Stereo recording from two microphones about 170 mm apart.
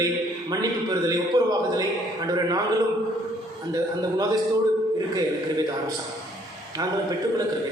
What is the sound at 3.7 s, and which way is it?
Speech, 20° right (ahead or behind).